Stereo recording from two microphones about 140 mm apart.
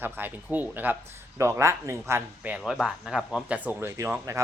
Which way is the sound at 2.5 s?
5° right (ahead or behind).